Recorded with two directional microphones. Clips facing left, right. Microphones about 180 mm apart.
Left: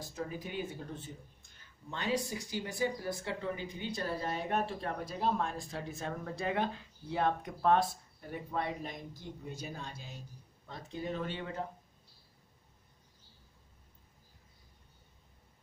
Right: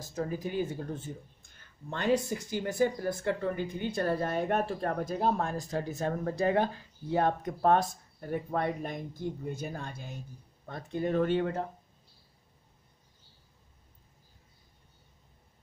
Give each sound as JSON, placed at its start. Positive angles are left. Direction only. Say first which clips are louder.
{"t": 0.0, "sound": "speech", "louder": "right 6 dB", "side_deg": -45}